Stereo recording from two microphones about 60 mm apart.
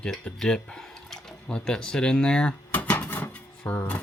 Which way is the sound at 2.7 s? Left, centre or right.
Left.